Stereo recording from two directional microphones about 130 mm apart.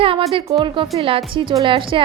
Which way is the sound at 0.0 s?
45° right (ahead or behind).